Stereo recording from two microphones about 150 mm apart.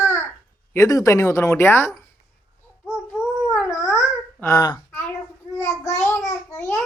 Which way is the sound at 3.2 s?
15° left (ahead or behind).